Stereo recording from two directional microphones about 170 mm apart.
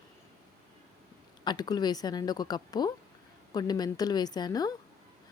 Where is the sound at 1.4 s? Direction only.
25° left (ahead or behind).